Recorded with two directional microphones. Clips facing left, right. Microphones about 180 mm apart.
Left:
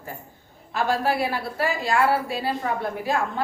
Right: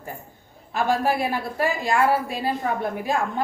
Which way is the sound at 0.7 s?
15° right (ahead or behind).